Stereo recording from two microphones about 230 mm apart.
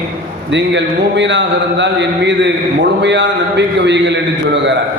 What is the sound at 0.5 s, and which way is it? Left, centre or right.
Speech, right.